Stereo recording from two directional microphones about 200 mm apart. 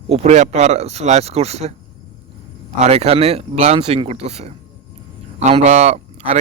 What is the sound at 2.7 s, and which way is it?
A man's voice, 30° right (ahead or behind).